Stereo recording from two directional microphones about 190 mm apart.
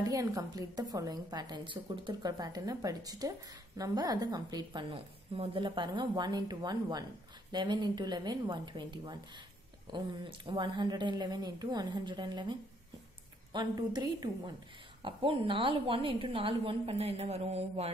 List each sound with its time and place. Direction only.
0.1 s a woman's voice: 20° right (ahead or behind)